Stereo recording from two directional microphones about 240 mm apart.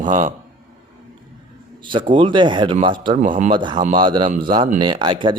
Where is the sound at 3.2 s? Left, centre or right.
Right.